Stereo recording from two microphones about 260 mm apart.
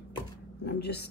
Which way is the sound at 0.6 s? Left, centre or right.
Left.